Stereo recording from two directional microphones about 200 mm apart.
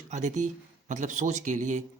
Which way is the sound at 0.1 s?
35° right (ahead or behind).